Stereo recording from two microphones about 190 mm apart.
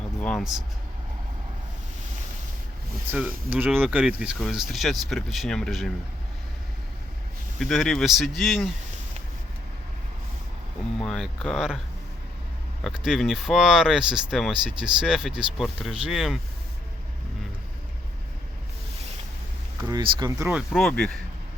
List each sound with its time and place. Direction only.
0.2 s speech: 5° left (ahead or behind)
3.1 s speech: 10° right (ahead or behind)
7.6 s speech: centre (ahead or behind)
11.0 s speech: 5° left (ahead or behind)
12.8 s speech: 5° right (ahead or behind)
19.8 s speech: 20° right (ahead or behind)
20.5 s speech: centre (ahead or behind)